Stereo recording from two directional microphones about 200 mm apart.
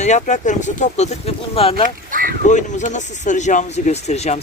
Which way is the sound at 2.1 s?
45° right (ahead or behind).